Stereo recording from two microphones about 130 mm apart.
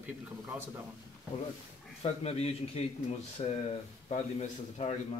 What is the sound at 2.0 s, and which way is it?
A man's voice, 50° left (ahead or behind).